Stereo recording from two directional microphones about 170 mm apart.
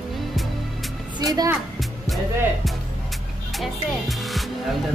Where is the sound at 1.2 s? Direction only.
20° right (ahead or behind).